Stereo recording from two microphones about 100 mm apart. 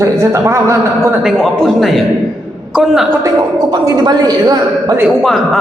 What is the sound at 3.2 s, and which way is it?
A man's voice, 35° right (ahead or behind).